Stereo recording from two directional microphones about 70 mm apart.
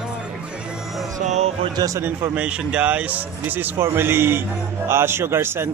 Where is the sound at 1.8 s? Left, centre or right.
Right.